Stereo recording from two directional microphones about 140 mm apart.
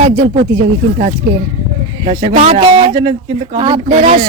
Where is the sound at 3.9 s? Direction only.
55° right (ahead or behind).